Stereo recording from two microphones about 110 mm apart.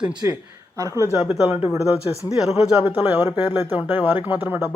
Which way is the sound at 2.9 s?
20° right (ahead or behind).